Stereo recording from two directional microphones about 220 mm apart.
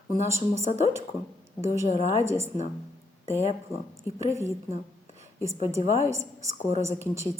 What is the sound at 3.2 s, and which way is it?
Speech, 30° left (ahead or behind).